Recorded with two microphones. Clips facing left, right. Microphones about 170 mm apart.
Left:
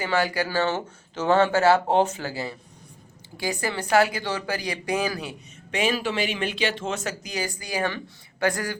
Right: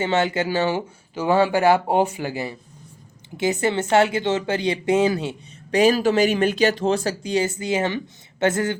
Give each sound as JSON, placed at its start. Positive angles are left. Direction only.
{"t": 0.0, "sound": "speech", "side_deg": -25}
{"t": 5.7, "sound": "speech", "side_deg": -40}